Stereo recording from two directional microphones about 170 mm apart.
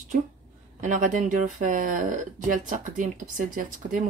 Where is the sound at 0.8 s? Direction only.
50° right (ahead or behind).